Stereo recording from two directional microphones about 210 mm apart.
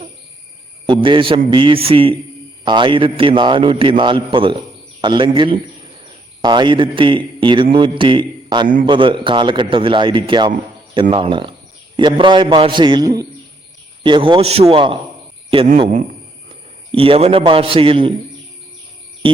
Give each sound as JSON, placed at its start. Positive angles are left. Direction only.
{"t": 0.9, "sound": "a man's voice", "side_deg": -25}
{"t": 16.9, "sound": "a man's voice", "side_deg": -25}